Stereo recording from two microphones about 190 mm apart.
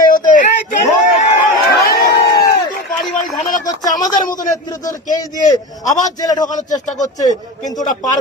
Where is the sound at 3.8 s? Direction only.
20° left (ahead or behind).